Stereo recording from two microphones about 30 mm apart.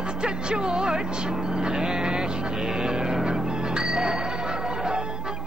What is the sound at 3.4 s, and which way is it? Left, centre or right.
Music, right.